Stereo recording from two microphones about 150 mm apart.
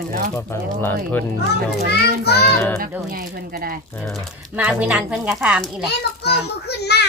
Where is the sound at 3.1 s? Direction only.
80° right.